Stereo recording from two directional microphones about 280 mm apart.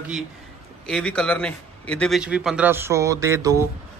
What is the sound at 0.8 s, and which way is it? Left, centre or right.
Speech, centre.